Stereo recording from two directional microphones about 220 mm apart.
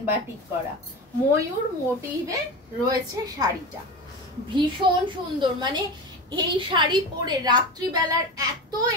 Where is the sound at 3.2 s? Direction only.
15° right (ahead or behind).